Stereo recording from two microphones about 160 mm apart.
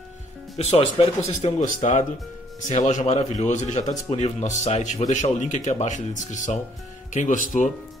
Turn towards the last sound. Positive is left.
turn(degrees=50)  # may be behind; listen again after turning